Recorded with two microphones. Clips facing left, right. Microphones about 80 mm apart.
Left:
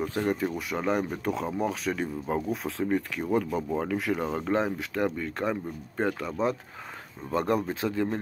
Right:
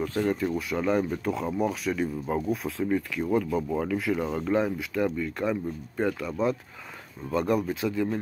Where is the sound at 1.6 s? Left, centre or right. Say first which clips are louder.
Right 1 dB; left.